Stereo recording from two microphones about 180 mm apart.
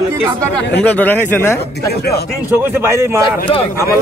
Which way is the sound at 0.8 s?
10° left (ahead or behind).